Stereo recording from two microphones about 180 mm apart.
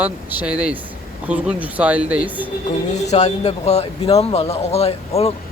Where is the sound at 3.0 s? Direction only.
40° left (ahead or behind).